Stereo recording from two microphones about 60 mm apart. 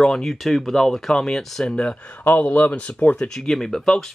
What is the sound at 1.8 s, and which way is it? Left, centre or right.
Speech, centre.